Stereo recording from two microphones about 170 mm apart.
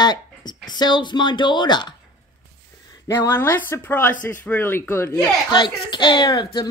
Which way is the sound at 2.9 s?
15° left (ahead or behind).